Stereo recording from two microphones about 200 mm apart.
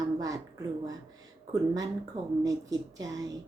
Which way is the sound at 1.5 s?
20° right (ahead or behind).